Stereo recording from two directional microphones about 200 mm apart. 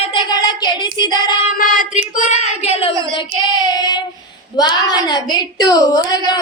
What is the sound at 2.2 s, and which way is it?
Speech, 35° left (ahead or behind).